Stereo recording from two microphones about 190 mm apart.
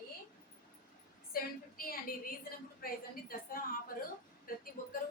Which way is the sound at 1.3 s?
50° left (ahead or behind).